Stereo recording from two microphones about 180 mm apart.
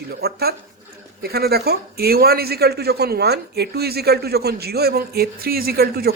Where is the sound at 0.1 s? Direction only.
60° right (ahead or behind).